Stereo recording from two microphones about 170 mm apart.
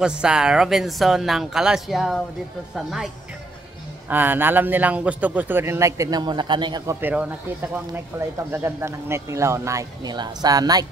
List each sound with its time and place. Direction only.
0.0 s speech: 5° right (ahead or behind)
4.1 s speech: 10° right (ahead or behind)
7.0 s speech: 10° right (ahead or behind)